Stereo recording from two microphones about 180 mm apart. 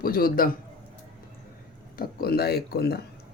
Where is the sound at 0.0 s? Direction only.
55° left (ahead or behind).